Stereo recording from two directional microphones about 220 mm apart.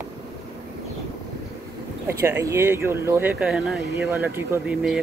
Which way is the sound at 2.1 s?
10° right (ahead or behind).